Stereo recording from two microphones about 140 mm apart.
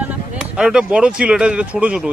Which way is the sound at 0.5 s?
5° right (ahead or behind).